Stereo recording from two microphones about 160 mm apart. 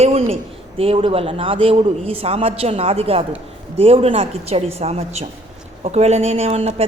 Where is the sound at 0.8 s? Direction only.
35° right (ahead or behind).